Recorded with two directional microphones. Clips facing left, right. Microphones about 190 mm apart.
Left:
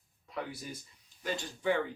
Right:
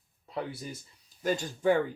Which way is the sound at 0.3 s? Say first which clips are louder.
Right 4 dB; 30° right (ahead or behind).